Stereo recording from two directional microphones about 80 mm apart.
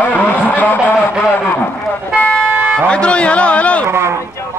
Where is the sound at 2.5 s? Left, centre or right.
Right.